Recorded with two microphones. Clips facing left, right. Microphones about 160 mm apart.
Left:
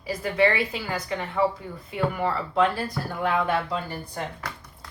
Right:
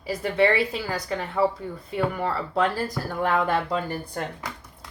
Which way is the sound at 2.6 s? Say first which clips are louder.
Left 1 dB; 40° right (ahead or behind).